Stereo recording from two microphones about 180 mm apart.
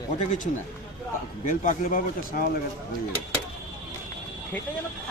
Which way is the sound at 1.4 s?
45° left (ahead or behind).